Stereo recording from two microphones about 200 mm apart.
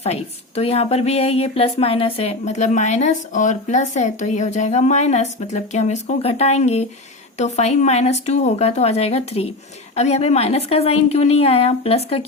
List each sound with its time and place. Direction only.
0.0 s a woman's voice: 30° left (ahead or behind)